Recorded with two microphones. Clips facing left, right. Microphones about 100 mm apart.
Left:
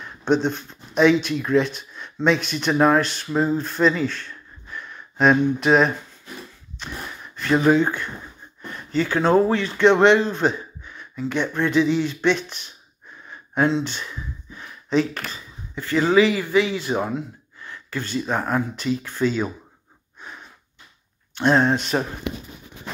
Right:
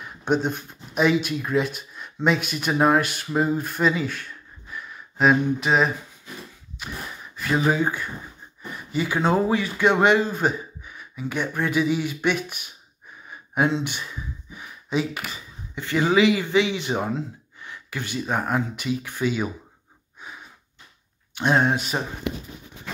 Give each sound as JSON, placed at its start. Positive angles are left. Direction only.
{"t": 0.0, "sound": "speech", "side_deg": -10}
{"t": 5.1, "sound": "a sound", "side_deg": 0}
{"t": 7.5, "sound": "speech", "side_deg": -5}
{"t": 21.4, "sound": "speech", "side_deg": -15}